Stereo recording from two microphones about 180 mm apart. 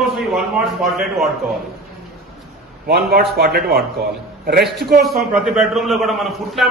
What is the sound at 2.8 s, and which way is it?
A man's voice, 60° right (ahead or behind).